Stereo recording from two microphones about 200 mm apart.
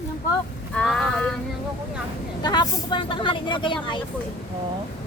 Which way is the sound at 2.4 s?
20° left (ahead or behind).